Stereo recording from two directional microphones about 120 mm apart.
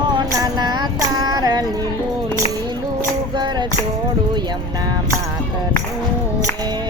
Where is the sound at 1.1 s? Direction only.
30° right (ahead or behind).